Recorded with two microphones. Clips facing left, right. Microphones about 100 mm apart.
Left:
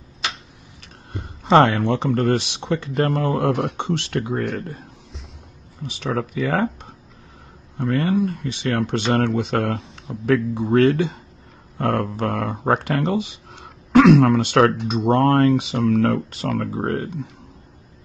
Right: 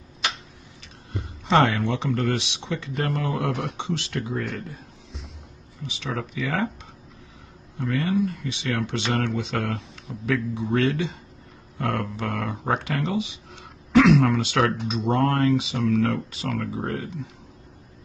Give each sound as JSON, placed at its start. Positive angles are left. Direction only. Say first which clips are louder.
{"t": 1.1, "sound": "speech", "louder": "left 6 dB", "side_deg": 45}
{"t": 5.9, "sound": "speech", "louder": "left 6 dB", "side_deg": 45}
{"t": 7.7, "sound": "speech", "louder": "left 4 dB", "side_deg": 50}